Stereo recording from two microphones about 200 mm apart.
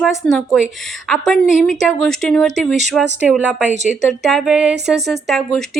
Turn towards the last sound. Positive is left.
turn(degrees=0)  # may be behind; listen again after turning